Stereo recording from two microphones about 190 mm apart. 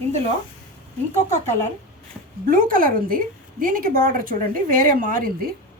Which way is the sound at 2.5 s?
45° right (ahead or behind).